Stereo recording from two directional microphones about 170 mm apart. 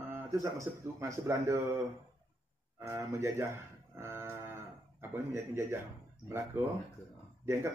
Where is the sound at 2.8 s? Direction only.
15° right (ahead or behind).